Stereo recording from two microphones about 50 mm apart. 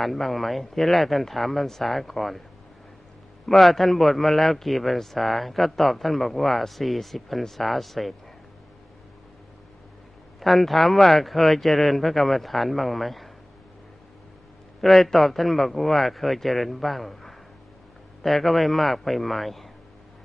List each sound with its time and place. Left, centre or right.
0.0 s a man's voice: centre
3.4 s a man's voice: centre
10.4 s a man's voice: centre
14.8 s a man's voice: centre